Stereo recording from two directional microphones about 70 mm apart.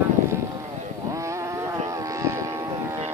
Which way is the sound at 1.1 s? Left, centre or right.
Right.